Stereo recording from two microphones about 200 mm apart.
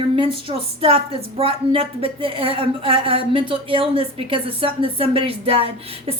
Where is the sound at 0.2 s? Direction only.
30° right (ahead or behind).